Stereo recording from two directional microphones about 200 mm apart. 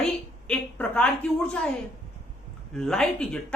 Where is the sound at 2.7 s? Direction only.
5° left (ahead or behind).